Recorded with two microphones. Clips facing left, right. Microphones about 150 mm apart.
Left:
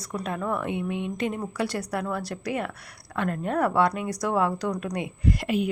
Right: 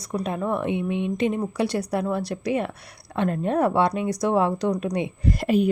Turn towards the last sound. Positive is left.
turn(degrees=-40)  # may be behind; listen again after turning